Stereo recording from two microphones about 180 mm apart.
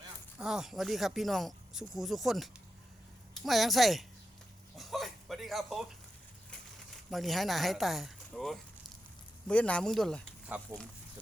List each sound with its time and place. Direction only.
0.3 s speech: 5° right (ahead or behind)
7.1 s speech: centre (ahead or behind)
10.5 s speech: 10° right (ahead or behind)